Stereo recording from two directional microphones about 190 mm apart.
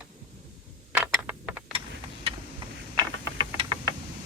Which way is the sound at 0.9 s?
5° right (ahead or behind).